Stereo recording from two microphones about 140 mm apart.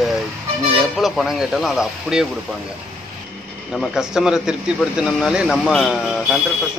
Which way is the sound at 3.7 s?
Centre (ahead or behind).